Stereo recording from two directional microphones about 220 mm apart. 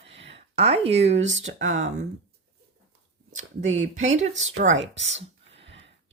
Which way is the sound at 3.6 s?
65° right (ahead or behind).